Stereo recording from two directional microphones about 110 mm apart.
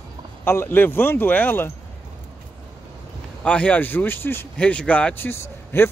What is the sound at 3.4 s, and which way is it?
Speech, 10° left (ahead or behind).